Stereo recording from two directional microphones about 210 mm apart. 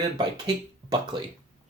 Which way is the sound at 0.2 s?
20° right (ahead or behind).